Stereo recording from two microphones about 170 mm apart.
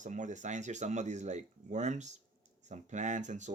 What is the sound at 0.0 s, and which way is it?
Speech, 45° right (ahead or behind).